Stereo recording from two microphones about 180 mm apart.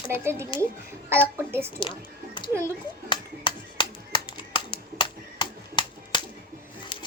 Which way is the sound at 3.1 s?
25° left (ahead or behind).